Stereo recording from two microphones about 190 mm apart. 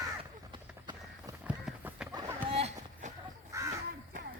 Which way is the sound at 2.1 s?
15° right (ahead or behind).